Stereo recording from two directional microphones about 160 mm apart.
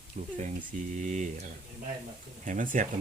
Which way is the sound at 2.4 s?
55° right (ahead or behind).